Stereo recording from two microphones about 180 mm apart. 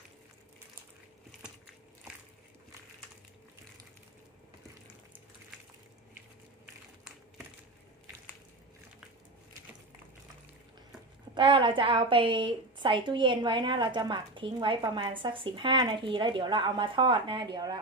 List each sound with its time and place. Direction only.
11.3 s a woman's voice: 25° right (ahead or behind)